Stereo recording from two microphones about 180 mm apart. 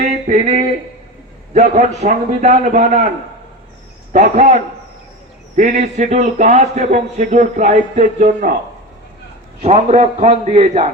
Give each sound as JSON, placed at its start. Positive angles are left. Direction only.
{"t": 0.0, "sound": "a sound", "side_deg": -40}
{"t": 1.5, "sound": "a man's voice", "side_deg": -40}
{"t": 4.1, "sound": "a man's voice", "side_deg": -45}
{"t": 9.6, "sound": "a man's voice", "side_deg": -40}